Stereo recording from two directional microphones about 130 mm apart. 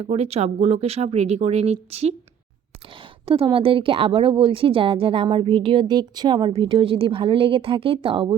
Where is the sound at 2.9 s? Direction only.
40° right (ahead or behind).